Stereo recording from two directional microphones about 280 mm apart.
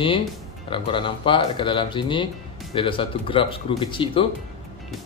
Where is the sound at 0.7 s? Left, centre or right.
Centre.